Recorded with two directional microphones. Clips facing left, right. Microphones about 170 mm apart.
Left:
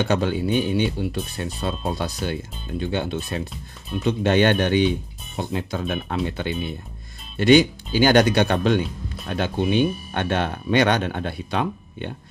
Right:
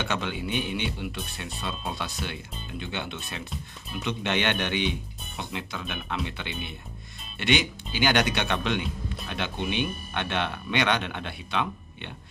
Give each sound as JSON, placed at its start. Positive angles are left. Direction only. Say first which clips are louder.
{"t": 0.0, "sound": "speech", "louder": "left 9 dB", "side_deg": 40}